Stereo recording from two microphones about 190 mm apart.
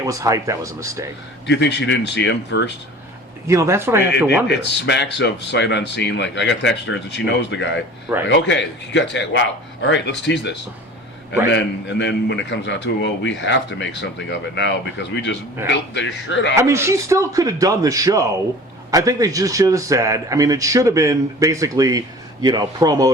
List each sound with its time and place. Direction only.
0.0 s a man's voice: 15° right (ahead or behind)
1.5 s a man's voice: 65° left (ahead or behind)
3.4 s a man's voice: 15° right (ahead or behind)
4.4 s a man's voice: 65° left (ahead or behind)
16.6 s a man's voice: 15° right (ahead or behind)